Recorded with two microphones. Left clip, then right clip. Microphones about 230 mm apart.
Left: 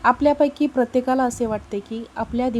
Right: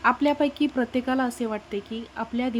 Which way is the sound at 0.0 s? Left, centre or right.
Centre.